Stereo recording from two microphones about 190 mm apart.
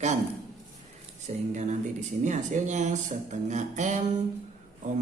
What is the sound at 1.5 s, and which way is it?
Speech, 40° right (ahead or behind).